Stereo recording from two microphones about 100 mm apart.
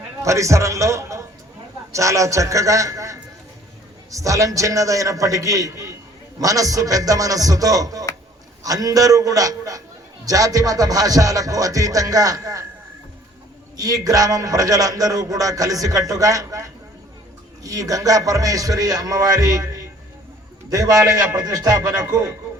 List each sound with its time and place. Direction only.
0.2 s a man's voice: 30° right (ahead or behind)
13.7 s a man's voice: 40° right (ahead or behind)